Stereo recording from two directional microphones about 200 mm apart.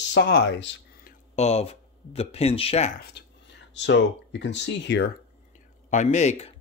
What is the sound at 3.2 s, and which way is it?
Whispering, 55° left (ahead or behind).